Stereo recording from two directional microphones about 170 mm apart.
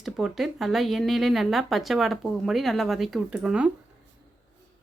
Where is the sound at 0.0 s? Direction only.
Centre (ahead or behind).